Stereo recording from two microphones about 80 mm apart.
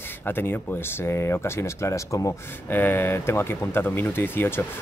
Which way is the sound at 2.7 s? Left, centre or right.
Left.